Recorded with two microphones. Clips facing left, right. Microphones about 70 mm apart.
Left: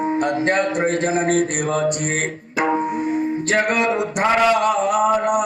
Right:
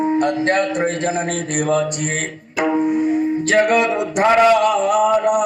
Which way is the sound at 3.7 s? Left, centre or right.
Left.